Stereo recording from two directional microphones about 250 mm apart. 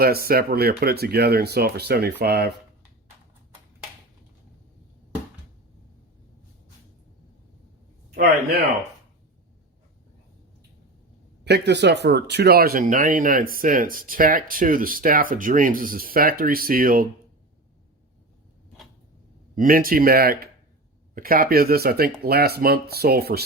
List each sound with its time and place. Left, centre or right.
0.0 s speech: right
8.1 s a sound: right
11.4 s speech: right
19.5 s speech: right